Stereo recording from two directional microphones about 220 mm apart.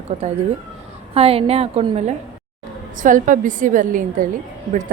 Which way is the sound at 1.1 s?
25° right (ahead or behind).